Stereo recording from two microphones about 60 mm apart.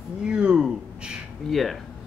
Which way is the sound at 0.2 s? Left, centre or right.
Centre.